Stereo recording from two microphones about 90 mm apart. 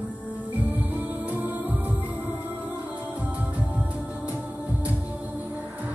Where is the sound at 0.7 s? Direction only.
20° right (ahead or behind).